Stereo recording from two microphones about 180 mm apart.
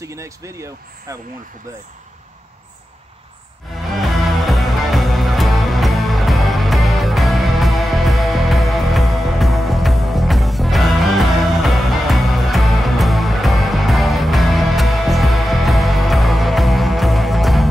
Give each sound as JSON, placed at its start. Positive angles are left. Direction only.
{"t": 0.0, "sound": "speech", "side_deg": -15}
{"t": 3.7, "sound": "music", "side_deg": 0}